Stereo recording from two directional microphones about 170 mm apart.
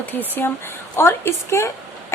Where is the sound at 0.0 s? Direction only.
10° left (ahead or behind).